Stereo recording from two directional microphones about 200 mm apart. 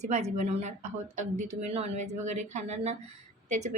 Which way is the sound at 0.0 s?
35° right (ahead or behind).